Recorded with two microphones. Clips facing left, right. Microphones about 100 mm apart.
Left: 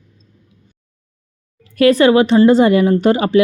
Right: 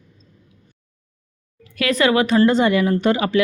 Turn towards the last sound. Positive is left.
turn(degrees=35)  # may be behind; listen again after turning